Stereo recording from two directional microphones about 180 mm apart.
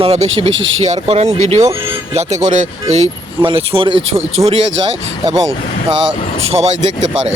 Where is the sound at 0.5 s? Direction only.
90° right.